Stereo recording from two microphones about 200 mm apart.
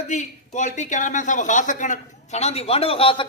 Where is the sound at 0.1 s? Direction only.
35° left (ahead or behind).